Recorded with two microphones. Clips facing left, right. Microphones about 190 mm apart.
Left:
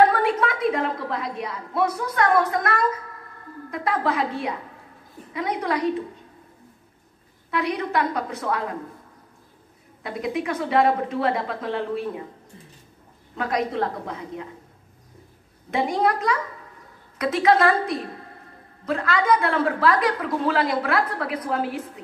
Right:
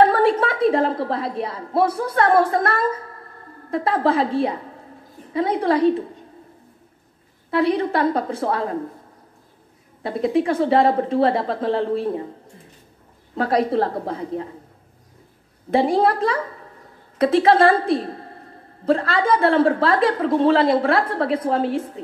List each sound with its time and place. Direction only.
0.0 s a woman's voice: 30° right (ahead or behind)
7.5 s a woman's voice: 30° right (ahead or behind)
10.0 s speech: 30° right (ahead or behind)
13.3 s speech: 30° right (ahead or behind)
15.7 s a woman's voice: 30° right (ahead or behind)